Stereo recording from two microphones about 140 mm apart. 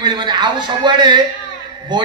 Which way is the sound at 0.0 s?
30° right (ahead or behind).